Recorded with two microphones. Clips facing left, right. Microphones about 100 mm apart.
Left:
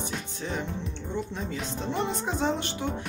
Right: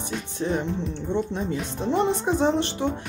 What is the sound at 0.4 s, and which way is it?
Speech, 25° right (ahead or behind).